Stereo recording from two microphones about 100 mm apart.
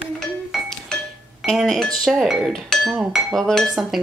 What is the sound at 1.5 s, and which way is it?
Speech, centre (ahead or behind).